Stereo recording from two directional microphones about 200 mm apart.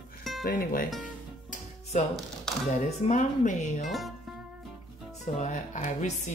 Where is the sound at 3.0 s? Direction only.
35° left (ahead or behind).